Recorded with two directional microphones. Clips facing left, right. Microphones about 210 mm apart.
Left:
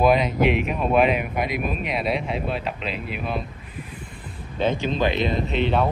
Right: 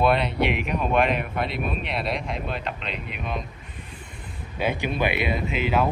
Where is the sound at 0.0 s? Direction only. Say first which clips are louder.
Left 3 dB; 5° left (ahead or behind).